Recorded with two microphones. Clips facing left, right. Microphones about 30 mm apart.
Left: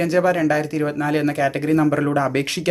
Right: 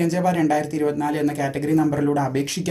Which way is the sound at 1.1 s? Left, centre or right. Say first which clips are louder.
Left 3 dB; left.